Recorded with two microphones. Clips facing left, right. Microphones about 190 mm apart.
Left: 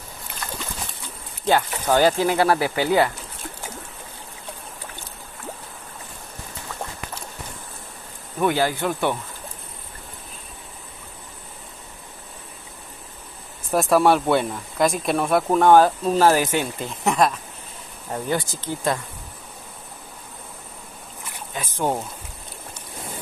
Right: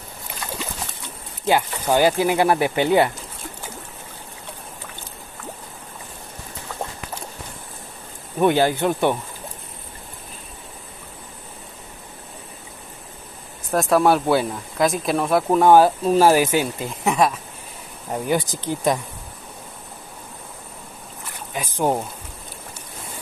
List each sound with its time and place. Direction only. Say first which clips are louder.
1.4 s speech: even; 15° right (ahead or behind)
8.4 s speech: right 4 dB; 20° right (ahead or behind)
13.7 s speech: even; centre (ahead or behind)
18.1 s speech: right 3 dB; 15° right (ahead or behind)
21.5 s speech: right 3 dB; 15° right (ahead or behind)